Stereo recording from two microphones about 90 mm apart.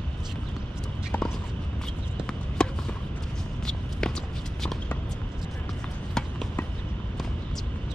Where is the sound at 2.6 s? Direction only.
10° left (ahead or behind).